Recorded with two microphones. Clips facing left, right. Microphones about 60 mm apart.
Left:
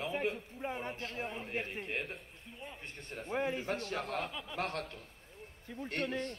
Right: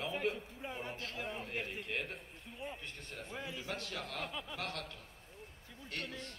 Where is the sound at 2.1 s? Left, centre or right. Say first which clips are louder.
Right 1 dB; centre.